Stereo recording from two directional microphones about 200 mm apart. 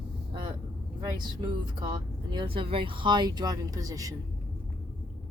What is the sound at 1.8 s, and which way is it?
Speech, 20° right (ahead or behind).